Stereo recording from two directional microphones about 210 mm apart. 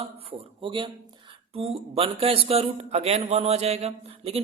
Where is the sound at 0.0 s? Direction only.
25° right (ahead or behind).